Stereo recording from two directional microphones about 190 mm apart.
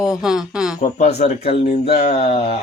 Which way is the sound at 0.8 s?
35° left (ahead or behind).